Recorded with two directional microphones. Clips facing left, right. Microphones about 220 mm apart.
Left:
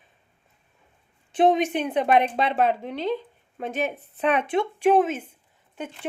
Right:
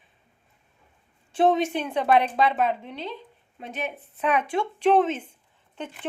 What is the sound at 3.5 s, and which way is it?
Speech, 50° left (ahead or behind).